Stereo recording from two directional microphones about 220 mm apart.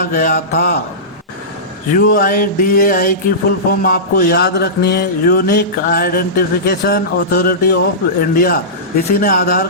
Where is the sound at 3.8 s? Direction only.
40° left (ahead or behind).